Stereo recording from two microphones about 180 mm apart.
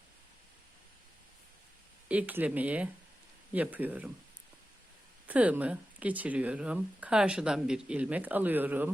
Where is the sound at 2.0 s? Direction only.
10° right (ahead or behind).